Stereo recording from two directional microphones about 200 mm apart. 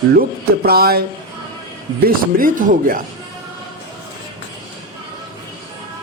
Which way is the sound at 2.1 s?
45° right (ahead or behind).